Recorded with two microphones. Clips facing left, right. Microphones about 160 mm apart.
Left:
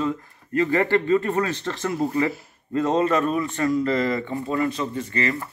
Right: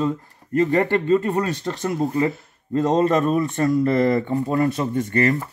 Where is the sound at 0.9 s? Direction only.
15° right (ahead or behind).